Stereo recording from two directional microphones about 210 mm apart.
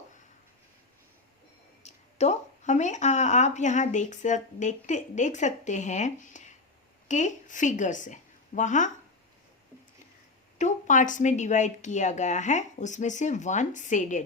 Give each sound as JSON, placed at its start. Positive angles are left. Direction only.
{"t": 1.8, "sound": "a woman's voice", "side_deg": 30}
{"t": 10.6, "sound": "speech", "side_deg": 35}